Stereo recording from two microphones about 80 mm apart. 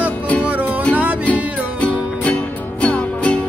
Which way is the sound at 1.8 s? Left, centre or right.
Centre.